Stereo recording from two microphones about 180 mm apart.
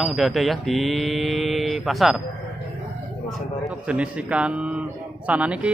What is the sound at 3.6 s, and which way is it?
Speech, 5° right (ahead or behind).